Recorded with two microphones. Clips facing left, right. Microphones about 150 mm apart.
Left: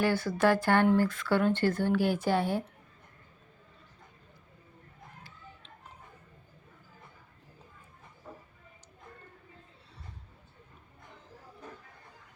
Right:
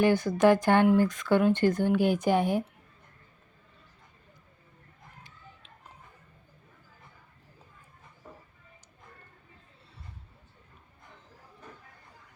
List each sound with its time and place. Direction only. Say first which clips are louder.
0.0 s speech: right 4 dB; 15° right (ahead or behind)